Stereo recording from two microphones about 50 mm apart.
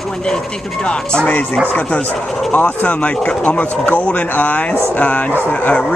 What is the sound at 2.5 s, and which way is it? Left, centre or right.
Speech, left.